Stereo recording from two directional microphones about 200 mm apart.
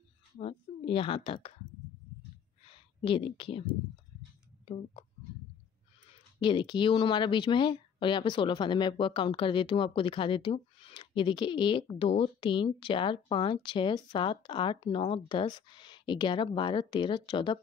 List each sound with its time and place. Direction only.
0.4 s a woman's voice: 25° left (ahead or behind)
2.7 s a sound: 25° left (ahead or behind)
6.4 s speech: 25° left (ahead or behind)